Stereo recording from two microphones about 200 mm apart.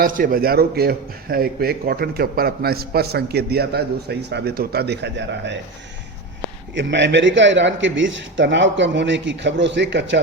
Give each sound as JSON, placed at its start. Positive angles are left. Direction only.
{"t": 0.0, "sound": "a man's voice", "side_deg": -45}
{"t": 6.7, "sound": "speech", "side_deg": -65}